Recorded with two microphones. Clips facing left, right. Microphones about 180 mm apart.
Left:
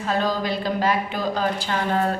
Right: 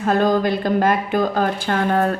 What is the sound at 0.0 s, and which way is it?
Speech, 50° right (ahead or behind).